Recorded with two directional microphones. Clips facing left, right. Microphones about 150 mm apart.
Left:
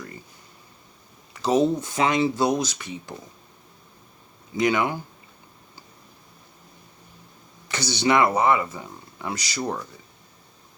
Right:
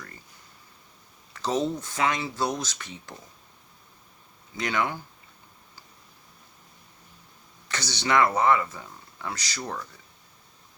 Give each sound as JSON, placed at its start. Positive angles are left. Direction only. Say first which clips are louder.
{"t": 1.3, "sound": "speech", "louder": "left 6 dB", "side_deg": 10}
{"t": 4.5, "sound": "speech", "louder": "left 6 dB", "side_deg": 15}
{"t": 7.7, "sound": "speech", "louder": "left 4 dB", "side_deg": 10}